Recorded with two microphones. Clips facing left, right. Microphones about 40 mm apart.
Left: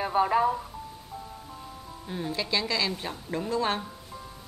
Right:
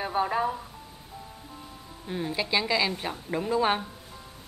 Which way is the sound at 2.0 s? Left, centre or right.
Centre.